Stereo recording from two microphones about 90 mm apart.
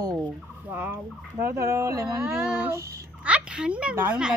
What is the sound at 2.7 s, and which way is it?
Speech, 35° right (ahead or behind).